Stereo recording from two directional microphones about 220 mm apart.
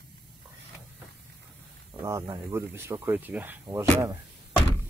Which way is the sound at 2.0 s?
15° right (ahead or behind).